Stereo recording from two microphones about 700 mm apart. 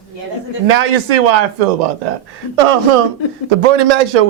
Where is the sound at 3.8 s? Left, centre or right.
Right.